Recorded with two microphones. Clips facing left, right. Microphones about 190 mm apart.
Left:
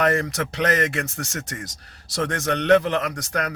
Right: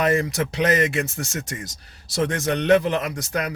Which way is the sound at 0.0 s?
10° right (ahead or behind).